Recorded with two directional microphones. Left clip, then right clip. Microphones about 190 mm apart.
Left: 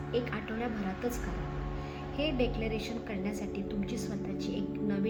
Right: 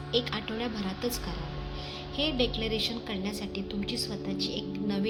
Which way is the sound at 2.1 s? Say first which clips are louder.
Right 3 dB; 35° right (ahead or behind).